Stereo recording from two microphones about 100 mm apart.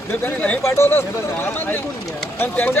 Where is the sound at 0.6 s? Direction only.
25° left (ahead or behind).